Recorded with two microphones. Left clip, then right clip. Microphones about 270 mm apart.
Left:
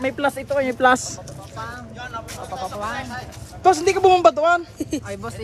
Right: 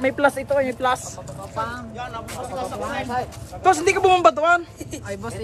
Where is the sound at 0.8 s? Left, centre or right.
Left.